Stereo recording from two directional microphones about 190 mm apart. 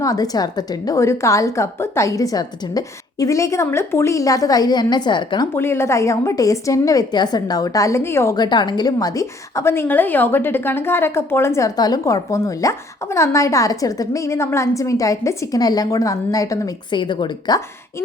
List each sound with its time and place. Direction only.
0.0 s a woman's voice: 20° left (ahead or behind)
5.5 s a woman's voice: 15° left (ahead or behind)